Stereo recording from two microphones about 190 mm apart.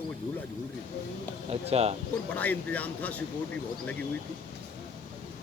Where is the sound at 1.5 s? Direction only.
35° right (ahead or behind).